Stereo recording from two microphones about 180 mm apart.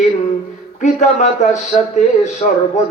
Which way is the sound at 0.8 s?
40° left (ahead or behind).